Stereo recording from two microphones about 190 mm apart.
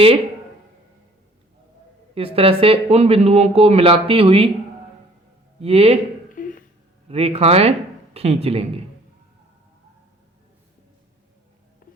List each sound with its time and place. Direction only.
2.1 s speech: 30° right (ahead or behind)
5.5 s speech: 30° right (ahead or behind)
6.3 s a sound: 45° left (ahead or behind)
7.1 s speech: 30° right (ahead or behind)